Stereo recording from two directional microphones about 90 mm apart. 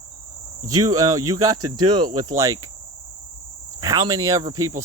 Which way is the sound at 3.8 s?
45° right (ahead or behind).